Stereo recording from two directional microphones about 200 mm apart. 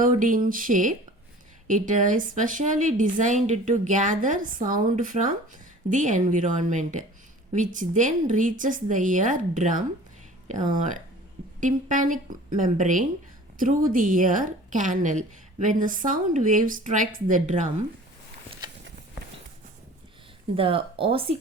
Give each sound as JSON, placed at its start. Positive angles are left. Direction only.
{"t": 0.0, "sound": "a woman's voice", "side_deg": -40}
{"t": 11.6, "sound": "a woman's voice", "side_deg": -40}
{"t": 20.6, "sound": "speech", "side_deg": -25}